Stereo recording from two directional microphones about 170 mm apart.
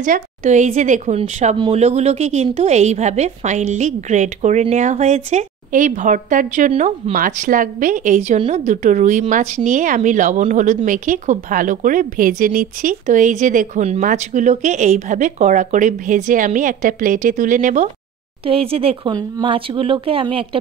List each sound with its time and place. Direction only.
0.0 s speech: 45° right (ahead or behind)
18.4 s speech: 35° right (ahead or behind)